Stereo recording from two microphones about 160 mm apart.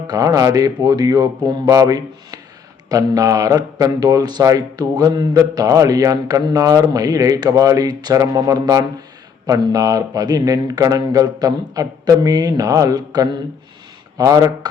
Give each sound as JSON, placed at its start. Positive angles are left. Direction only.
{"t": 0.1, "sound": "a man's voice", "side_deg": -25}